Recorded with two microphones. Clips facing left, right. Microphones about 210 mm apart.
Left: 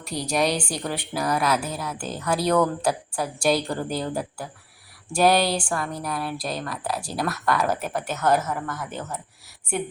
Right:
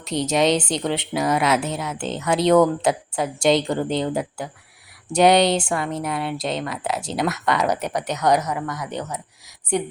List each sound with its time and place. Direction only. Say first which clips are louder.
0.0 s speech: right 4 dB; 20° right (ahead or behind)